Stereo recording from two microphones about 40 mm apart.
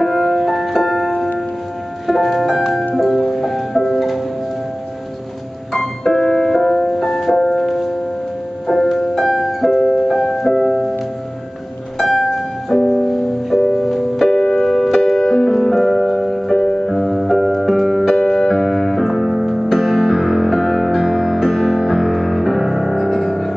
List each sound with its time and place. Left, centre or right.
0.0 s music: centre
5.7 s music: centre
8.9 s music: centre
12.0 s music: centre
14.3 s keyboard: centre
15.0 s music: centre
18.1 s music: centre
18.5 s keyboard: centre